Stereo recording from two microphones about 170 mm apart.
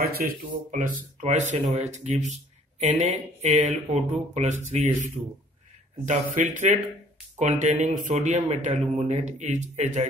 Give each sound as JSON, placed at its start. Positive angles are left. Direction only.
{"t": 0.0, "sound": "speech", "side_deg": -60}
{"t": 3.4, "sound": "speech", "side_deg": -45}